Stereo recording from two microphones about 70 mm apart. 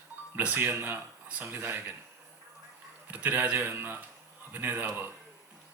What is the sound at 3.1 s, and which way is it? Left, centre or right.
A man's voice, right.